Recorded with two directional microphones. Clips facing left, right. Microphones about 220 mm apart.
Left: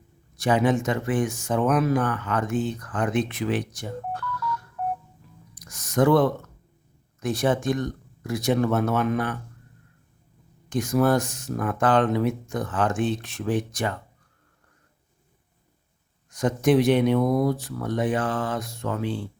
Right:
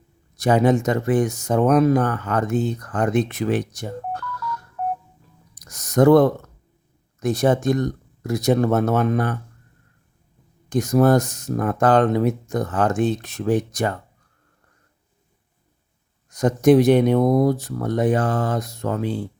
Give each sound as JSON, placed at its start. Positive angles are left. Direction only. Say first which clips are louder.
{"t": 0.3, "sound": "speech", "louder": "right 4 dB", "side_deg": -40}
{"t": 5.5, "sound": "a sound", "louder": "right 5 dB", "side_deg": -40}
{"t": 7.2, "sound": "speech", "louder": "right 5 dB", "side_deg": -40}
{"t": 10.7, "sound": "speech", "louder": "right 5 dB", "side_deg": -40}
{"t": 16.3, "sound": "speech", "louder": "right 6 dB", "side_deg": -40}